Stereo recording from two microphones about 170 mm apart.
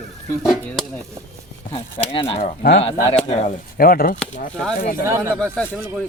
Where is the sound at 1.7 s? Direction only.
35° left (ahead or behind).